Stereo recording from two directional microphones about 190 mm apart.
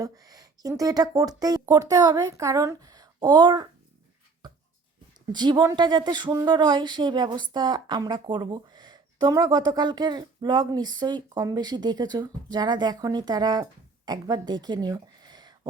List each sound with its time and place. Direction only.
0.0 s speech: 20° right (ahead or behind)
4.4 s a sound: 20° right (ahead or behind)
5.3 s speech: 25° right (ahead or behind)